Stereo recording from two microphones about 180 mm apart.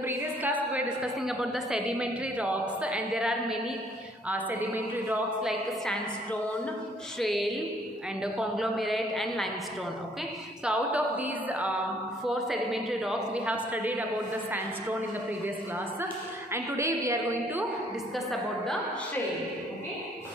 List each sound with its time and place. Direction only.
0.0 s a sound: 10° right (ahead or behind)
0.7 s a woman's voice: 5° right (ahead or behind)
7.2 s a woman's voice: centre (ahead or behind)
10.6 s a woman's voice: 10° right (ahead or behind)
16.5 s a woman's voice: 15° right (ahead or behind)
18.1 s a woman's voice: centre (ahead or behind)